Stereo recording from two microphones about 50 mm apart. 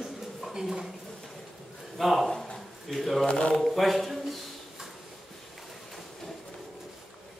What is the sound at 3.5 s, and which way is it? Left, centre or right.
Speech, centre.